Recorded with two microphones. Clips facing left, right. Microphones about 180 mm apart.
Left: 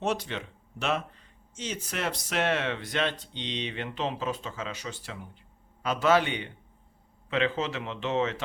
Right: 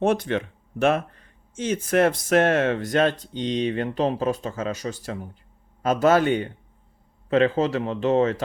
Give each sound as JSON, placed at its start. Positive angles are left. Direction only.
{"t": 0.0, "sound": "speech", "side_deg": -50}